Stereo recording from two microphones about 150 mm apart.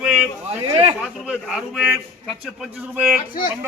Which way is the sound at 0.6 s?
35° right (ahead or behind).